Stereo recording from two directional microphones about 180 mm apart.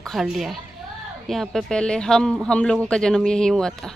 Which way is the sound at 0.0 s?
Centre (ahead or behind).